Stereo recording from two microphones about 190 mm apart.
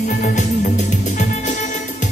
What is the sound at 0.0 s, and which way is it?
Music, 45° left (ahead or behind).